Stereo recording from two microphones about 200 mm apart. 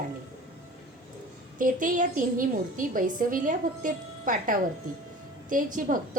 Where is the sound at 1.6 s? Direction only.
40° right (ahead or behind).